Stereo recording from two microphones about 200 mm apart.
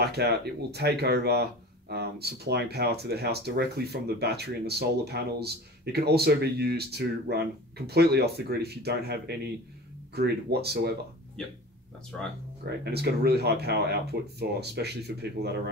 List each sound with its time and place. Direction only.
0.0 s speech: 55° right (ahead or behind)
12.6 s speech: 55° right (ahead or behind)